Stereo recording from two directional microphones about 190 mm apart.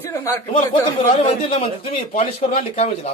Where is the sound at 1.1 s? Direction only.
30° left (ahead or behind).